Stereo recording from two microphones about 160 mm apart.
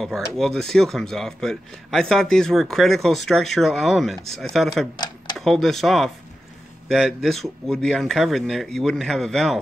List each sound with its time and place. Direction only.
0.0 s speech: centre (ahead or behind)
4.9 s tick-tock: 25° left (ahead or behind)
5.4 s speech: centre (ahead or behind)